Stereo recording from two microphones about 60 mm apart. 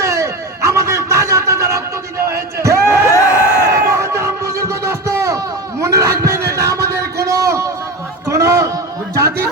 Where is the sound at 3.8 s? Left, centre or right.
Right.